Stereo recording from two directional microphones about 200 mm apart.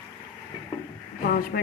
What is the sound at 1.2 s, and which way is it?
Speech, 50° left (ahead or behind).